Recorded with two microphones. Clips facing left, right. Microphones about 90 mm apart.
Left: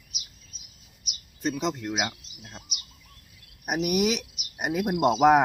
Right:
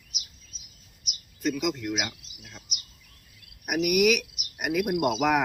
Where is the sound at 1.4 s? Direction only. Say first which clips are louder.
Even; 30° left (ahead or behind).